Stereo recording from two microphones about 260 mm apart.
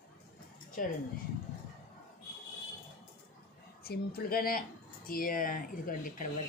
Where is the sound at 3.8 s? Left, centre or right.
Left.